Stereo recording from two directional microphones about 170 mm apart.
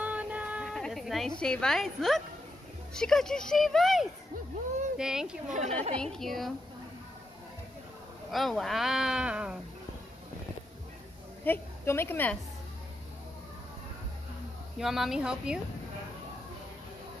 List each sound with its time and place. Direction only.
0.0 s a sound: 10° right (ahead or behind)
1.4 s speech: 5° left (ahead or behind)
5.5 s a woman's voice: 40° right (ahead or behind)
6.1 s speech: centre (ahead or behind)
8.3 s speech: centre (ahead or behind)
11.4 s a woman's voice: 15° left (ahead or behind)
14.8 s speech: centre (ahead or behind)